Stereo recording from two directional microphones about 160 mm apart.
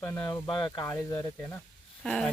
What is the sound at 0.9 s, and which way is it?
Speech, 15° left (ahead or behind).